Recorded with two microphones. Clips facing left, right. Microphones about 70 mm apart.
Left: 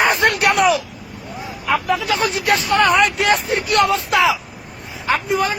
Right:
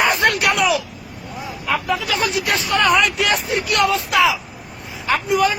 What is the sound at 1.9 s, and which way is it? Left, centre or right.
Speech, left.